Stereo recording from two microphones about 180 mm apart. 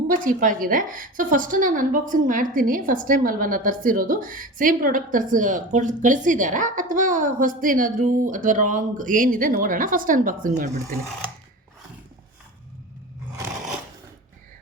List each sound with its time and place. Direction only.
0.1 s a woman's voice: 50° right (ahead or behind)